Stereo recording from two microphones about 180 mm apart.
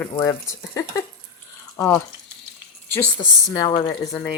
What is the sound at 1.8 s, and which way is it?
Speech, 15° left (ahead or behind).